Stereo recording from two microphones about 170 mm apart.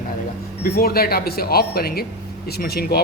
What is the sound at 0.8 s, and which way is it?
A woman's voice, 65° left (ahead or behind).